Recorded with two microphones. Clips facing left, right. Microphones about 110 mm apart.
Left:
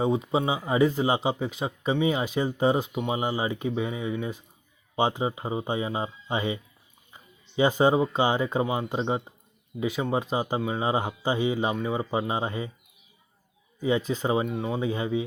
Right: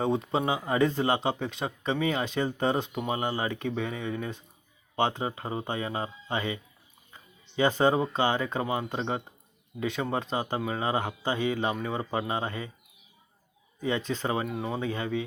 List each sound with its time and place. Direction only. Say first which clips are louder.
0.0 s speech: left 2 dB; 5° left (ahead or behind)
13.8 s speech: left 4 dB; 10° left (ahead or behind)
14.4 s speech: left 3 dB; centre (ahead or behind)
14.8 s speech: left 4 dB; 15° left (ahead or behind)